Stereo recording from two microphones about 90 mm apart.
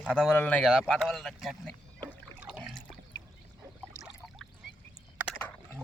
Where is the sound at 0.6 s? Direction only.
5° right (ahead or behind).